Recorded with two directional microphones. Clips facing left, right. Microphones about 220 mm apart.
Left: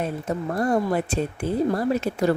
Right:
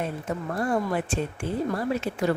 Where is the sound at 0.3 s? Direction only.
40° left (ahead or behind).